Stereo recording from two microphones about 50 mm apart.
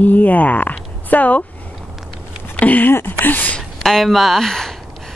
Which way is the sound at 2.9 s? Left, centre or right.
Left.